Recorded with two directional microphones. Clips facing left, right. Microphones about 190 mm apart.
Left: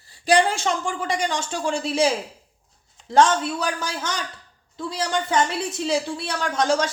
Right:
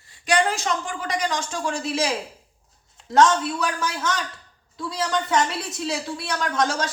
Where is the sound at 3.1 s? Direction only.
30° left (ahead or behind).